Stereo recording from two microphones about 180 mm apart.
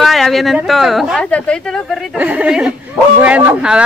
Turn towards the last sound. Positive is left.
turn(degrees=-5)  # may be behind; listen again after turning